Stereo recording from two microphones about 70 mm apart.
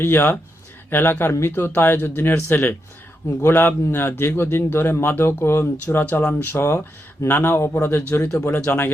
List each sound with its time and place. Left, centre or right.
0.0 s a man's voice: left